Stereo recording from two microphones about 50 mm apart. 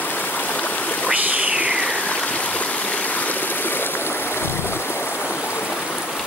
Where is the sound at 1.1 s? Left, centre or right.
Right.